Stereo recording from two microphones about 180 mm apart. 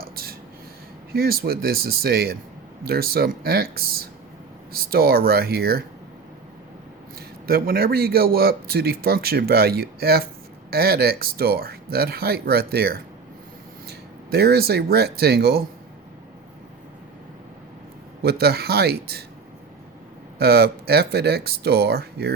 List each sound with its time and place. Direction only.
0.0 s a sound: 55° right (ahead or behind)
1.1 s a man's voice: 60° right (ahead or behind)
7.2 s a man's voice: 55° right (ahead or behind)
18.2 s a man's voice: 60° right (ahead or behind)
20.4 s a man's voice: 60° right (ahead or behind)